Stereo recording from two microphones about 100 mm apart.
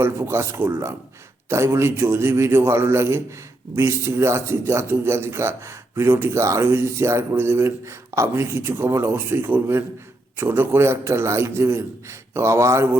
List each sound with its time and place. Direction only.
0.0 s speech: 25° right (ahead or behind)